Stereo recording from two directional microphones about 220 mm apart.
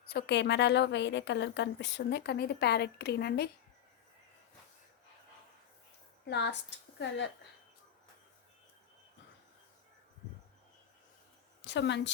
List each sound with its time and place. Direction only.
0.0 s a woman's voice: 45° left (ahead or behind)
6.2 s a woman's voice: 50° left (ahead or behind)
11.6 s a woman's voice: 55° left (ahead or behind)